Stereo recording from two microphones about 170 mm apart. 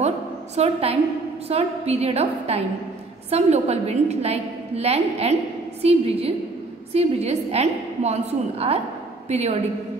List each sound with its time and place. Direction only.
0.6 s a woman's voice: 35° right (ahead or behind)